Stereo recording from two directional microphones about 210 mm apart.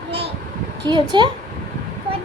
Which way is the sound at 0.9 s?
20° right (ahead or behind).